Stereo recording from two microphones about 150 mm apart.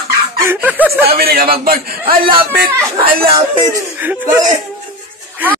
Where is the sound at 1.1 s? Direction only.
90° right.